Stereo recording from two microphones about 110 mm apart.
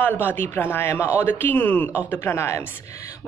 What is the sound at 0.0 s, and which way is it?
A woman's voice, 15° left (ahead or behind).